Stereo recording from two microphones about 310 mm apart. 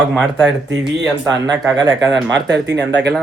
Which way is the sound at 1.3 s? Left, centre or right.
Centre.